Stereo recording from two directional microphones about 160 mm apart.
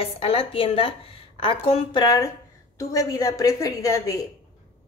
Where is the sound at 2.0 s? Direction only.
20° left (ahead or behind).